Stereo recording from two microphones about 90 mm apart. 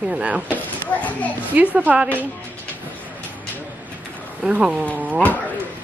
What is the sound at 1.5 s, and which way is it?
Speech, 15° right (ahead or behind).